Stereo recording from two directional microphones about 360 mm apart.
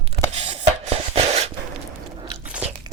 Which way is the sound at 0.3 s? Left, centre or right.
Centre.